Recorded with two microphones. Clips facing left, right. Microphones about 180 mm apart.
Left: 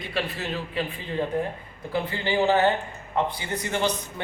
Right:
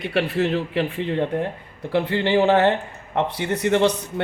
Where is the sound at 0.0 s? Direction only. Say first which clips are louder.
Right 9 dB; 70° right (ahead or behind).